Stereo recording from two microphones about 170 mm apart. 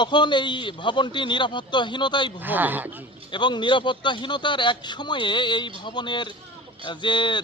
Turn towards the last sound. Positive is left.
turn(degrees=25)  # may be behind; listen again after turning